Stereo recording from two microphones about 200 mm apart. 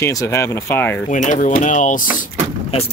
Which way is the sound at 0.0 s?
15° left (ahead or behind).